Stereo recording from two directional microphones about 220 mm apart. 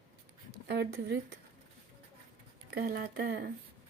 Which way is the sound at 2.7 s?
45° right (ahead or behind).